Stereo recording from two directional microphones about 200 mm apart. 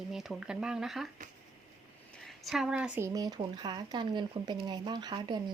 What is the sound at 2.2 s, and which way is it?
Speech, centre (ahead or behind).